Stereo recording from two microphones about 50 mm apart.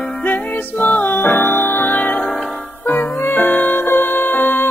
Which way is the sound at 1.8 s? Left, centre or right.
Left.